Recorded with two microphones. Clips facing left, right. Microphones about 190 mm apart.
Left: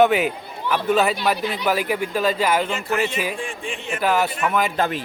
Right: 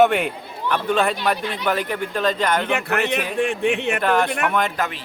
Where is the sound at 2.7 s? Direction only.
65° right (ahead or behind).